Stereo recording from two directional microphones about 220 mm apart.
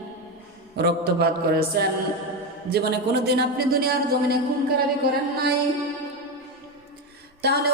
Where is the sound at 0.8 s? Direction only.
50° right (ahead or behind).